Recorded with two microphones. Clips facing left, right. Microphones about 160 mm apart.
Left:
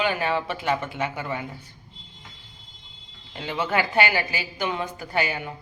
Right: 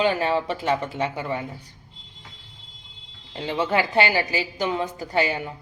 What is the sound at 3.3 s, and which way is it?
A woman's voice, 30° right (ahead or behind).